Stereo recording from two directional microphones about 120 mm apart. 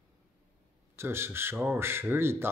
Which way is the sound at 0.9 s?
20° right (ahead or behind).